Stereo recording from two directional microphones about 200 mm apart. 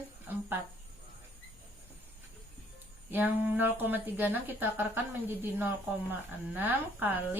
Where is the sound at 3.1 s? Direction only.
10° right (ahead or behind).